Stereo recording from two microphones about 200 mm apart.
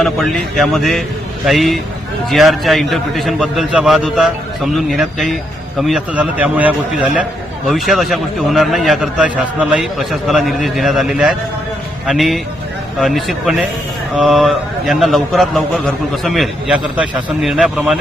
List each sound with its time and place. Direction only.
0.0 s a man's voice: centre (ahead or behind)